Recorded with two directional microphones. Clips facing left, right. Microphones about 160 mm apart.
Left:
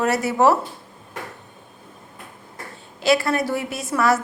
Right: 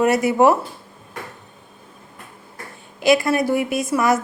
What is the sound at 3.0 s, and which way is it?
A woman's voice, 15° right (ahead or behind).